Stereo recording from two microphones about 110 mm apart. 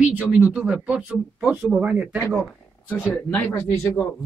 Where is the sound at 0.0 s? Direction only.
10° right (ahead or behind).